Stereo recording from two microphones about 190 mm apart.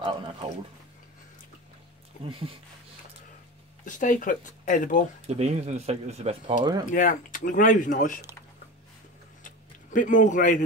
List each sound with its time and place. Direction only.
2.2 s speech: 25° right (ahead or behind)
3.8 s speech: 45° left (ahead or behind)
5.2 s speech: 35° right (ahead or behind)
6.9 s speech: 45° left (ahead or behind)
9.4 s a sound: 45° left (ahead or behind)